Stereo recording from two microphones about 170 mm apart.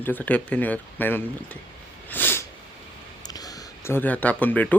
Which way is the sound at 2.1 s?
10° left (ahead or behind).